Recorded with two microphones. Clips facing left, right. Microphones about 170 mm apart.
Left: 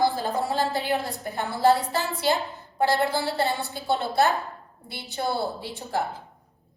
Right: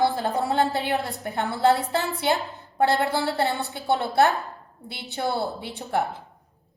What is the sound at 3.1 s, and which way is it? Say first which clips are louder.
Music: right 1 dB; 60° right (ahead or behind).